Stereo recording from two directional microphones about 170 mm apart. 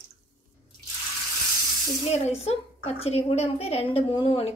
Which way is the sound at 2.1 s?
40° left (ahead or behind).